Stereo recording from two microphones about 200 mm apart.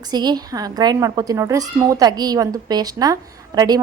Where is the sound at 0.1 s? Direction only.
20° right (ahead or behind).